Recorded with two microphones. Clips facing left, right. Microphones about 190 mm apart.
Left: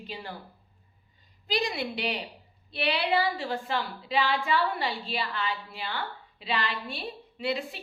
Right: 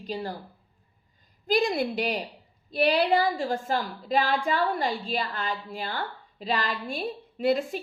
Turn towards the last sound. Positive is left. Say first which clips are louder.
# right 7 dB
turn(degrees=-45)  # may be behind; listen again after turning